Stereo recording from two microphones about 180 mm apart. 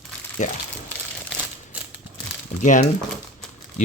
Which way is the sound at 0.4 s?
40° left (ahead or behind).